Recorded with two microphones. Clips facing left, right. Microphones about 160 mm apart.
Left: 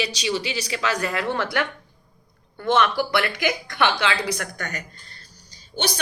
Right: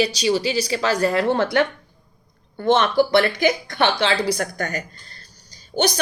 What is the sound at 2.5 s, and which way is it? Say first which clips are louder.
A woman's voice: right 4 dB; 30° right (ahead or behind).